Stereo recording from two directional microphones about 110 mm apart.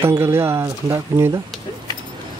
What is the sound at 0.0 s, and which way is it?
Speech, 20° right (ahead or behind).